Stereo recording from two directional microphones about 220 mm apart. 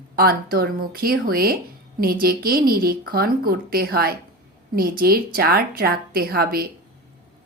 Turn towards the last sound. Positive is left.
turn(degrees=-45)  # may be behind; listen again after turning